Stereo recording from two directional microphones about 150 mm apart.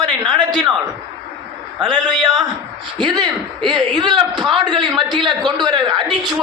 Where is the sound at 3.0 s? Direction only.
30° right (ahead or behind).